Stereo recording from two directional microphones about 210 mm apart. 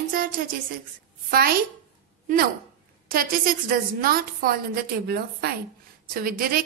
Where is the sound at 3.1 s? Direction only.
45° right (ahead or behind).